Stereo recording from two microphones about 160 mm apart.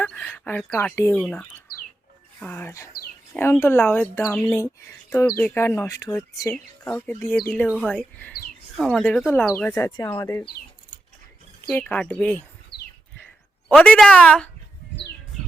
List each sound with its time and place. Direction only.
0.0 s speech: 5° left (ahead or behind)
6.5 s speech: 5° left (ahead or behind)
11.7 s speech: 5° left (ahead or behind)
13.7 s speech: 10° left (ahead or behind)